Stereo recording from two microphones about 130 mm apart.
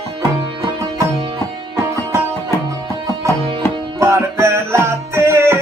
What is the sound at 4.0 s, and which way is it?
Music, 20° right (ahead or behind).